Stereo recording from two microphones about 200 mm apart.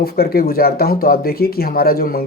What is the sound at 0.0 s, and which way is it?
Speech, 50° left (ahead or behind).